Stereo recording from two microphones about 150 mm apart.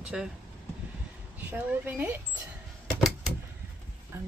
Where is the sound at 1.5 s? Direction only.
10° right (ahead or behind).